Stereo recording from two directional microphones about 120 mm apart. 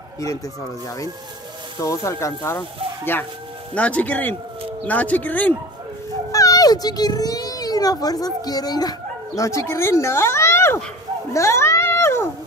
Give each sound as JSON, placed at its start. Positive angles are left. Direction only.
{"t": 1.8, "sound": "speech", "side_deg": 25}
{"t": 3.7, "sound": "speech", "side_deg": 10}
{"t": 6.3, "sound": "a child's voice", "side_deg": 30}
{"t": 11.3, "sound": "a sound", "side_deg": 25}